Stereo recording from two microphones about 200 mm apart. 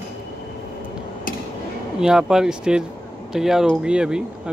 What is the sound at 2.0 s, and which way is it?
Speech, 5° right (ahead or behind).